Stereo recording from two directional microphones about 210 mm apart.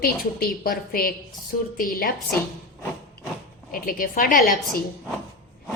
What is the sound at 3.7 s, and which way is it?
Speech, 45° left (ahead or behind).